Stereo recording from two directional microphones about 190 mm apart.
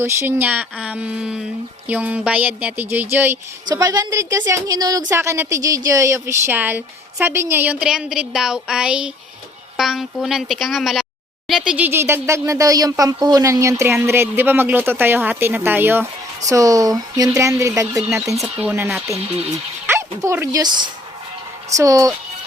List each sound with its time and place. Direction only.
0.0 s a woman's voice: 10° right (ahead or behind)
18.3 s speech: 5° right (ahead or behind)